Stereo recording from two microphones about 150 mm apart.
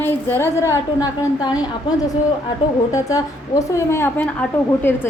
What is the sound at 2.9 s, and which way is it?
A woman's voice, 20° left (ahead or behind).